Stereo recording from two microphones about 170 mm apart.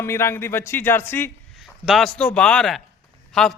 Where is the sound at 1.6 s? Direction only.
Centre (ahead or behind).